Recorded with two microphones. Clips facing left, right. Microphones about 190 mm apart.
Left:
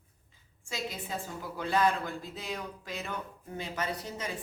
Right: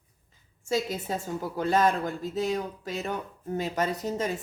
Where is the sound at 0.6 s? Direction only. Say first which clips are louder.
Right 9 dB; 45° right (ahead or behind).